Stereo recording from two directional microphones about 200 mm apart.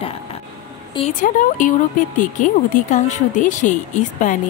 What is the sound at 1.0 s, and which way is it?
Speech, 25° left (ahead or behind).